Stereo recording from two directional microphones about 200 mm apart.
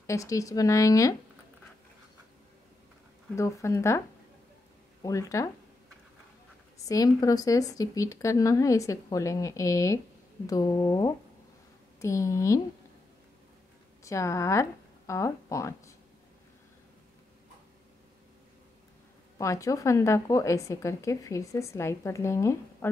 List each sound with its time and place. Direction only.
0.0 s a woman's voice: 15° left (ahead or behind)
3.3 s a woman's voice: 15° left (ahead or behind)
5.0 s a woman's voice: 15° left (ahead or behind)
6.9 s a woman's voice: 15° left (ahead or behind)
14.0 s speech: 15° left (ahead or behind)
19.3 s a woman's voice: 15° left (ahead or behind)